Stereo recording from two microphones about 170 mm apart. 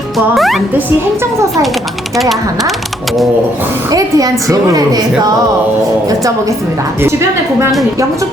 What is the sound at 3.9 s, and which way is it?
A woman's voice, 20° right (ahead or behind).